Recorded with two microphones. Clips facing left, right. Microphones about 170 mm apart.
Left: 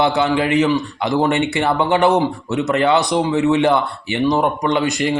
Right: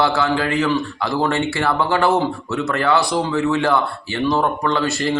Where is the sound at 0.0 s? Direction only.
20° left (ahead or behind).